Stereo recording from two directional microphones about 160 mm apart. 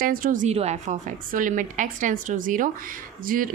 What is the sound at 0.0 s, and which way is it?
A woman's voice, 60° right (ahead or behind).